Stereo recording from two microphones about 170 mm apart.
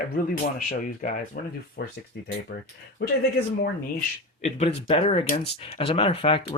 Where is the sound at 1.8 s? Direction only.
70° left (ahead or behind).